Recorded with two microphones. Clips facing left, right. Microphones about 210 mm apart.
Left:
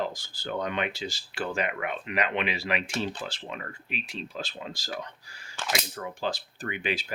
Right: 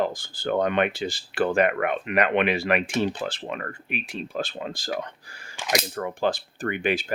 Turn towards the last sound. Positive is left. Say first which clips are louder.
# right 6 dB
turn(degrees=-55)  # may be behind; listen again after turning